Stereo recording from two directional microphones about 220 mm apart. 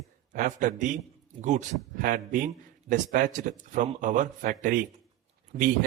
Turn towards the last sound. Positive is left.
turn(degrees=-35)  # may be behind; listen again after turning